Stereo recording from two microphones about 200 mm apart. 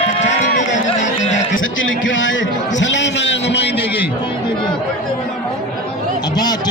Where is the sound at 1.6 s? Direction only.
75° left (ahead or behind).